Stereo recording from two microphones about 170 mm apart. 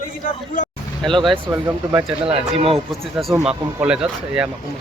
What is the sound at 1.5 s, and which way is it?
Speech, 15° right (ahead or behind).